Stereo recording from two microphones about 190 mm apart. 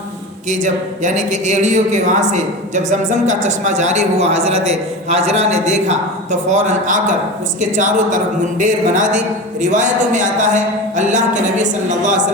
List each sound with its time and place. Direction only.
0.5 s speech: 40° right (ahead or behind)